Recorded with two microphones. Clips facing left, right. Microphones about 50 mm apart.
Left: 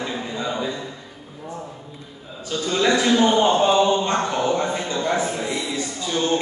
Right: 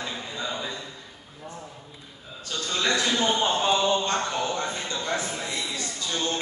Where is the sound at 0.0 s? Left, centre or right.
Centre.